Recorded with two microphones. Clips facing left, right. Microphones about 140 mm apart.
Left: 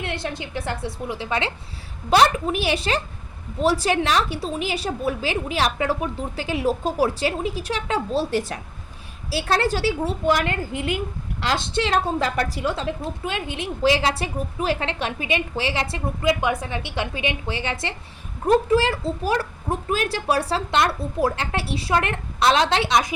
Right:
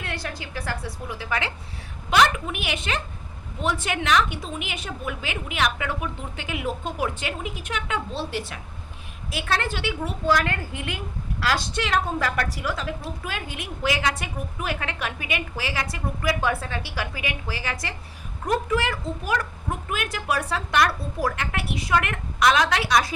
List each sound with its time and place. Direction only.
0.0 s a woman's voice: 25° left (ahead or behind)